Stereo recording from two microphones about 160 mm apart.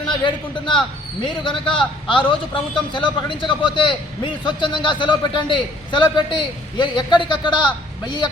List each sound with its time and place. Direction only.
0.3 s a man's voice: 30° left (ahead or behind)